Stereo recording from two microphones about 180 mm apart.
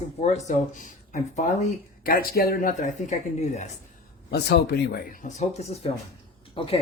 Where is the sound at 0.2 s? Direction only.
40° left (ahead or behind).